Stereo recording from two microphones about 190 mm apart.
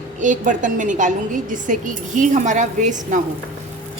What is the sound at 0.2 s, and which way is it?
A woman's voice, 40° right (ahead or behind).